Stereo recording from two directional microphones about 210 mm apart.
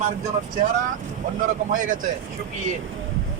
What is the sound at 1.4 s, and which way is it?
Speech, 40° right (ahead or behind).